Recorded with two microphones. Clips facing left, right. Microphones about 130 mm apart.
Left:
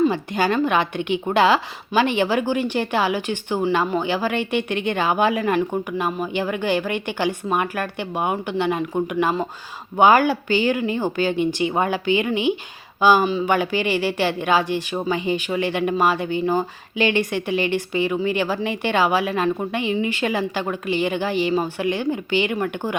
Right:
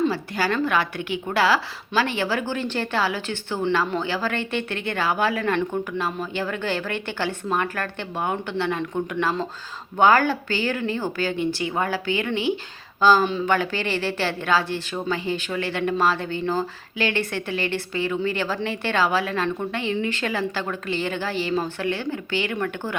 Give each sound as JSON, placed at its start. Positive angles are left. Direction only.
{"t": 0.1, "sound": "a woman's voice", "side_deg": 20}
{"t": 13.2, "sound": "speech", "side_deg": 5}
{"t": 13.5, "sound": "a woman's voice", "side_deg": 15}